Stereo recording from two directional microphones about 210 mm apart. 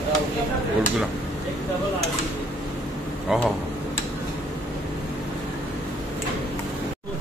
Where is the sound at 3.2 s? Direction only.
Centre (ahead or behind).